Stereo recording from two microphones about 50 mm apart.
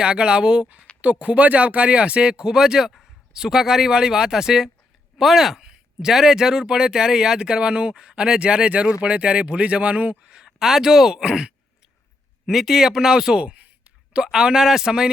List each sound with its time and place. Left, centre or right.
0.0 s speech: centre
10.3 s speech: centre